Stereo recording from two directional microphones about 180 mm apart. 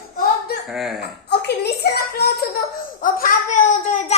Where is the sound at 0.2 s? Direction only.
60° left (ahead or behind).